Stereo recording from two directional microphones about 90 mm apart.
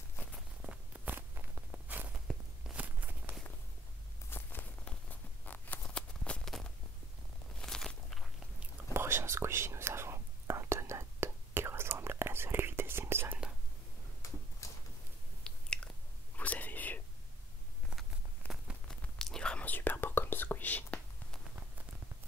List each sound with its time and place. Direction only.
0.6 s walk: 15° right (ahead or behind)
2.1 s walk: 10° right (ahead or behind)
4.3 s a sound: 25° left (ahead or behind)
5.4 s zipper: 20° left (ahead or behind)
7.6 s walk: 5° left (ahead or behind)
8.9 s whispering: 25° right (ahead or behind)
14.2 s a sound: 35° left (ahead or behind)
15.4 s chewing: 10° left (ahead or behind)
16.3 s whispering: 20° left (ahead or behind)
18.4 s a sound: 20° left (ahead or behind)
18.9 s whispering: 5° left (ahead or behind)